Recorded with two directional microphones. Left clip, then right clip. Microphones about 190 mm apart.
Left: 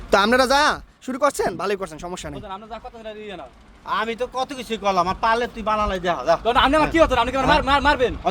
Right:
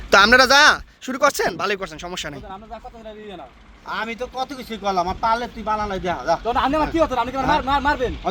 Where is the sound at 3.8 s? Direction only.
60° left (ahead or behind); by 6.1 s 35° left (ahead or behind).